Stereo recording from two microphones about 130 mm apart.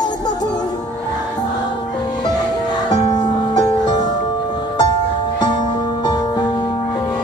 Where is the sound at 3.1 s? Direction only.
30° left (ahead or behind).